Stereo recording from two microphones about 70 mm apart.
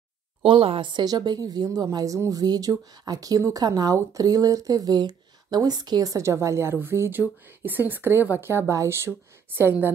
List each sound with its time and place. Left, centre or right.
0.9 s a woman's voice: right
2.4 s speech: right
6.1 s a woman's voice: right